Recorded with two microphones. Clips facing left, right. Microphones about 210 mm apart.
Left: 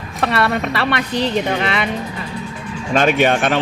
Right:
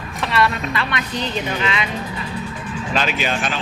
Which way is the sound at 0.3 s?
65° left (ahead or behind).